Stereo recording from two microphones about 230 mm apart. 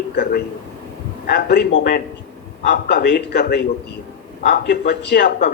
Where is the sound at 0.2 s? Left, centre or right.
Left.